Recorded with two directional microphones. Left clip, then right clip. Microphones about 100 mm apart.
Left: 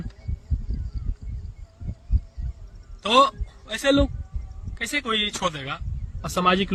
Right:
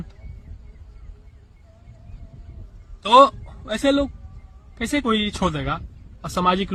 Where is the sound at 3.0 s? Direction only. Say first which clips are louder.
Right 5 dB; 30° left (ahead or behind).